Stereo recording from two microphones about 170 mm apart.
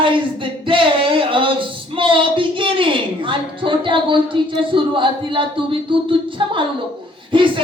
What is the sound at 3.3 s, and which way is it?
Speech, 30° right (ahead or behind).